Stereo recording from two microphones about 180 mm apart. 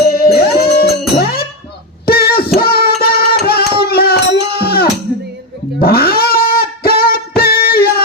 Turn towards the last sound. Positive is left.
turn(degrees=60)  # may be behind; listen again after turning